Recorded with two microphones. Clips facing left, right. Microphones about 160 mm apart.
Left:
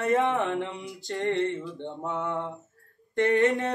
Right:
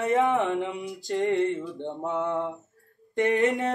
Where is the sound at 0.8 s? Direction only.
20° right (ahead or behind).